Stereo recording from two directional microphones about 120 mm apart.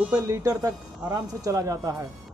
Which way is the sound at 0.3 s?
25° right (ahead or behind).